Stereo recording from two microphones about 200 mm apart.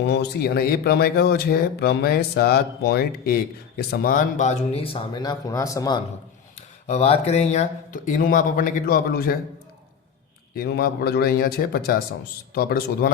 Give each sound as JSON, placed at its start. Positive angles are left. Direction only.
{"t": 0.0, "sound": "speech", "side_deg": 60}
{"t": 6.6, "sound": "speech", "side_deg": 35}
{"t": 10.5, "sound": "speech", "side_deg": 50}